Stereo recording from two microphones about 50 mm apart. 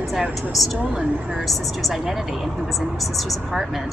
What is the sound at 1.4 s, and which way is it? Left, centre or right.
A woman's voice, centre.